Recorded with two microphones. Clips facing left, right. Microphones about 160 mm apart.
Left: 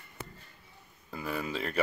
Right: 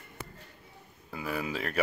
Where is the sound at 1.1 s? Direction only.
5° right (ahead or behind).